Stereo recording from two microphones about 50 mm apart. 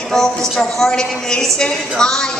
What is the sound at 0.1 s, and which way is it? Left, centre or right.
A woman's voice, centre.